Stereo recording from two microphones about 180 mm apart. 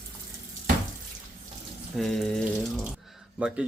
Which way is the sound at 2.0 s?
Centre (ahead or behind).